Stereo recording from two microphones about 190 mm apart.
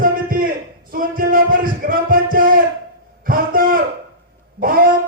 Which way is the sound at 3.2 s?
50° right (ahead or behind).